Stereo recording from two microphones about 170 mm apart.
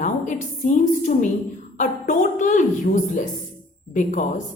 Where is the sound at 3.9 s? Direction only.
50° left (ahead or behind).